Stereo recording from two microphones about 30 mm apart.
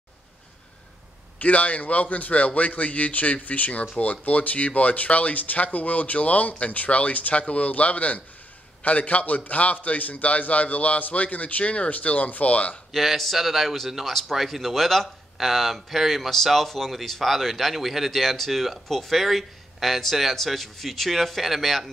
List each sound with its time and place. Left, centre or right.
1.4 s speech: left
11.9 s speech: left
12.9 s speech: centre
14.3 s speech: centre